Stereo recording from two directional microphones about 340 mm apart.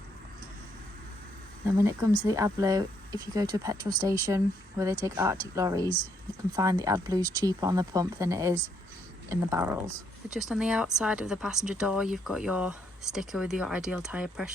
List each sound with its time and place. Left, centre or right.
1.8 s speech: centre